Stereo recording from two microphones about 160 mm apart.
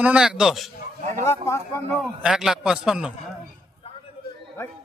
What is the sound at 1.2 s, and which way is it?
Speech, 15° left (ahead or behind).